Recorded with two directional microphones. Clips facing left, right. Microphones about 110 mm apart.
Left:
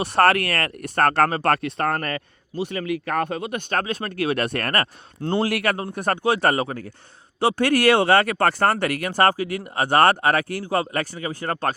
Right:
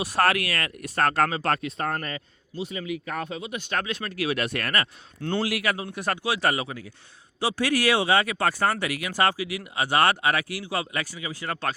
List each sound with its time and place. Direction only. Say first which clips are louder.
0.0 s speech: left 5 dB; 60° left (ahead or behind)
5.2 s a man's voice: left 4 dB; 35° left (ahead or behind)
5.5 s speech: left 4 dB; 55° left (ahead or behind)